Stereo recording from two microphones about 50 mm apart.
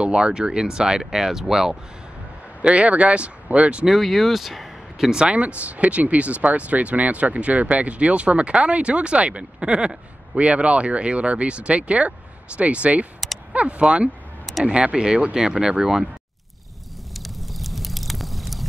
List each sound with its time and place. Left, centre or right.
0.0 s speech: centre
2.6 s speech: right
3.8 s speech: centre
5.2 s speech: right
17.1 s a sound: centre